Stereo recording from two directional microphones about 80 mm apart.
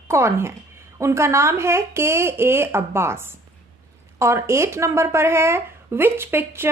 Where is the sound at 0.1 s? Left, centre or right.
Right.